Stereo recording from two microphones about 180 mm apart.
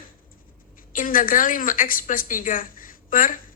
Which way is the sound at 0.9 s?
50° left (ahead or behind).